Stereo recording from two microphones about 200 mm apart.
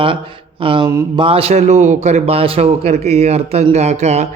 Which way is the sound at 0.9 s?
15° right (ahead or behind).